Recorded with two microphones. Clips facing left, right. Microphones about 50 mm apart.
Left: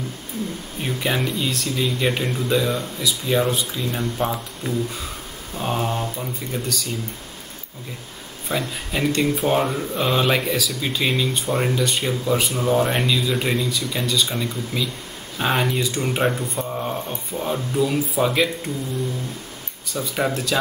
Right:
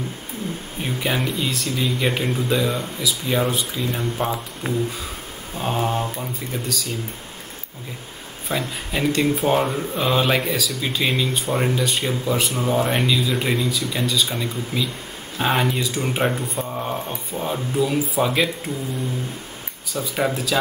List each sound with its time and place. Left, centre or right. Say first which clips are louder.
0.8 s speech: even; centre
4.6 s a sound: right 1 dB; centre
5.6 s speech: right 1 dB; centre
8.5 s speech: even; centre
19.9 s speech: even; centre